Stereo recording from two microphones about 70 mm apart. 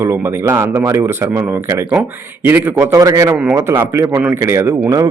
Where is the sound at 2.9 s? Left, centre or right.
Right.